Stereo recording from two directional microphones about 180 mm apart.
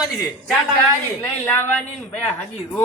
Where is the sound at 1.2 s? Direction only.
10° left (ahead or behind).